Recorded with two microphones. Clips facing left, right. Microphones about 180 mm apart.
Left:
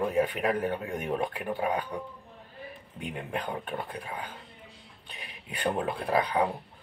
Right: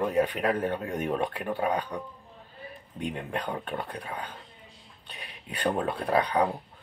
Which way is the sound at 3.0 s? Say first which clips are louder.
Right 2 dB; 5° left (ahead or behind).